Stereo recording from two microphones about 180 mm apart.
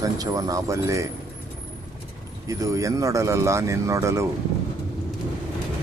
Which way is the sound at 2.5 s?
20° right (ahead or behind).